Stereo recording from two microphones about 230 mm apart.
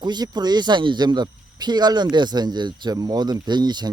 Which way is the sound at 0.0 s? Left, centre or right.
Centre.